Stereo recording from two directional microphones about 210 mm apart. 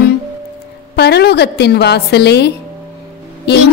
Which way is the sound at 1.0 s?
50° left (ahead or behind).